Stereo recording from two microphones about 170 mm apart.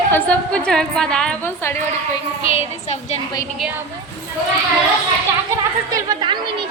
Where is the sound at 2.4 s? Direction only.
40° left (ahead or behind).